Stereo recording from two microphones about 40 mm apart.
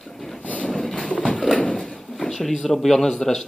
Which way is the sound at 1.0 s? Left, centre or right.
Left.